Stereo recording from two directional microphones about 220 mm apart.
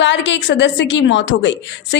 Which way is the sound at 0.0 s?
55° left (ahead or behind).